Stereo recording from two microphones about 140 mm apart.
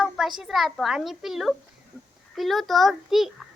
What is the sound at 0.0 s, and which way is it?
A child's voice, 5° right (ahead or behind).